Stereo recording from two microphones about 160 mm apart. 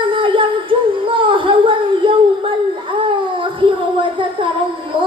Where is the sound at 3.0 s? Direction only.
30° right (ahead or behind).